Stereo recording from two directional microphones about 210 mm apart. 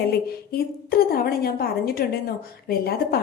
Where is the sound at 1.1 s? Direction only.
45° left (ahead or behind).